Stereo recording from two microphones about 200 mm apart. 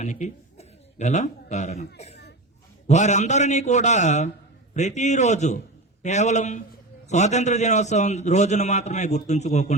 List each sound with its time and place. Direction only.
0.0 s a man's voice: 35° left (ahead or behind)